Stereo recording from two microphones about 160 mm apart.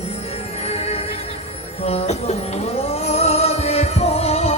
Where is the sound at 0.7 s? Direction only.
40° left (ahead or behind).